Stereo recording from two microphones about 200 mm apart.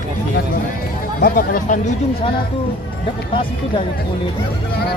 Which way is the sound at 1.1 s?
45° left (ahead or behind).